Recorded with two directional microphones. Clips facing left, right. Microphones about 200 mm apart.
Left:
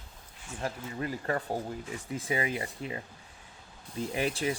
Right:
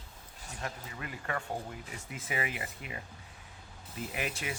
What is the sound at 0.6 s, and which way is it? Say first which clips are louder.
Speech: left 7 dB; 35° left (ahead or behind).